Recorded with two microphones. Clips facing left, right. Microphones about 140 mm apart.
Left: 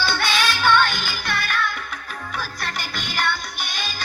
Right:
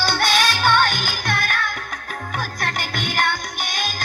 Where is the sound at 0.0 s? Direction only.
40° right (ahead or behind).